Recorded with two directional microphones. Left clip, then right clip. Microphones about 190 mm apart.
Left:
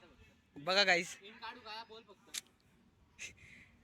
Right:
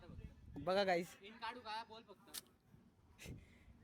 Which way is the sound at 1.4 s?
20° right (ahead or behind).